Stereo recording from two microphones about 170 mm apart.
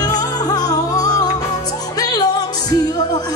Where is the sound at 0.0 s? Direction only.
25° left (ahead or behind).